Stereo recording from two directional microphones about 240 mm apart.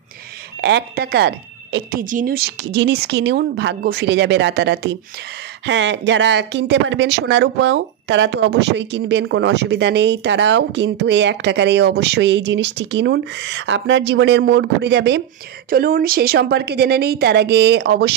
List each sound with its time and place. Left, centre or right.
0.6 s a woman's voice: right